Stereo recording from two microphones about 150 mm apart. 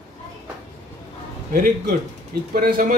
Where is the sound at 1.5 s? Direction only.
65° right (ahead or behind).